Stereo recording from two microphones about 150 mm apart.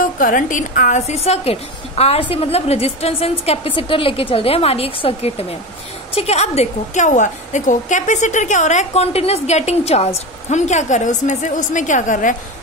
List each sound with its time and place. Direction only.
0.2 s a woman's voice: 65° left (ahead or behind)